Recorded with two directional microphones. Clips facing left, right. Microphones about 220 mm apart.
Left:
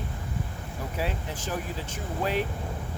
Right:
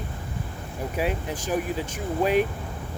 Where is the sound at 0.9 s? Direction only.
15° right (ahead or behind).